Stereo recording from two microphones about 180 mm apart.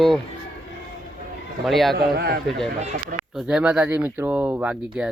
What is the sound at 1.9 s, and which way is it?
Speech, 60° right (ahead or behind).